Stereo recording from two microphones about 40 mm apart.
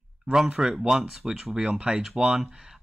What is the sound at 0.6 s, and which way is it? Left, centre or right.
Speech, centre.